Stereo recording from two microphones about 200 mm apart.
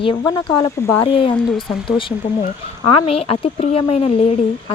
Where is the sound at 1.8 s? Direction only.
25° left (ahead or behind).